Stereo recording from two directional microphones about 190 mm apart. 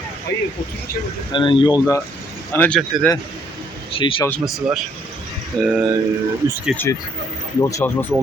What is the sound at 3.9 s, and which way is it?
Speech, 25° left (ahead or behind).